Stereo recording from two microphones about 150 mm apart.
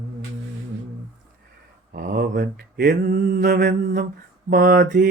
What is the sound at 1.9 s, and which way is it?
Mantra, 80° right.